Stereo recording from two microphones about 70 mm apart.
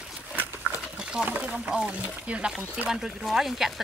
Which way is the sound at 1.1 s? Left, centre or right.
Centre.